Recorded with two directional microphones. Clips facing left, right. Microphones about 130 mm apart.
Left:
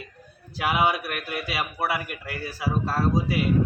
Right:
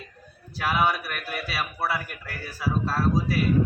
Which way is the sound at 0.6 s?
15° left (ahead or behind).